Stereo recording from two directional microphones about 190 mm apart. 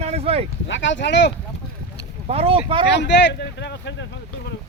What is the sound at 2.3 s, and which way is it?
Speech, 30° right (ahead or behind).